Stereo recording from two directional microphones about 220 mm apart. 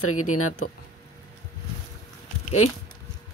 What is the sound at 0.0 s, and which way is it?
Speech, 80° left.